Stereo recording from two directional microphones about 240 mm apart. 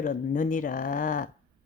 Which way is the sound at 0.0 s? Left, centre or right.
Left.